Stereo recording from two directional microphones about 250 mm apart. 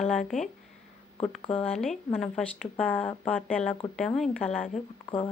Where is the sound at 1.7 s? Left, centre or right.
Centre.